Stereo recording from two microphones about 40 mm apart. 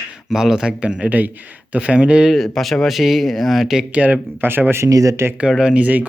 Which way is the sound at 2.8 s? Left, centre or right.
Centre.